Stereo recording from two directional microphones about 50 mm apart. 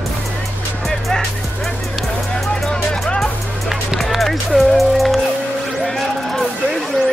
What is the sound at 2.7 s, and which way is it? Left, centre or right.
Music, centre.